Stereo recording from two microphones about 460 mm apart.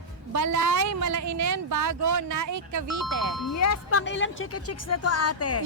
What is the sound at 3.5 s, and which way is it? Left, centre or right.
Speech, left.